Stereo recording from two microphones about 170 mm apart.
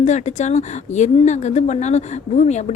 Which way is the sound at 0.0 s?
45° left (ahead or behind).